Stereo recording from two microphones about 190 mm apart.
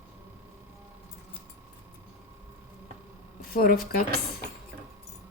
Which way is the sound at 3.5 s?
50° left (ahead or behind).